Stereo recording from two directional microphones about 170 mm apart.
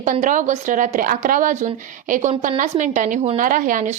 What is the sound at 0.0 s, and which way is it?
A woman's voice, 50° right (ahead or behind).